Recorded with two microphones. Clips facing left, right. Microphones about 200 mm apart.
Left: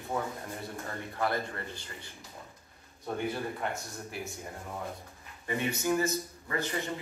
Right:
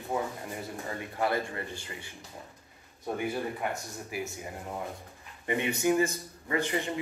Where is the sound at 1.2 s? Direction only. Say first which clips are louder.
Right 2 dB; 15° right (ahead or behind).